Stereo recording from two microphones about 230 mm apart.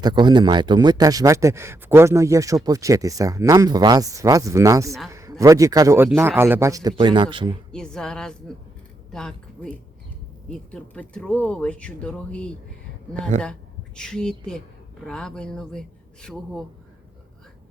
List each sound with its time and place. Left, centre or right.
0.0 s speech: centre
7.7 s speech: centre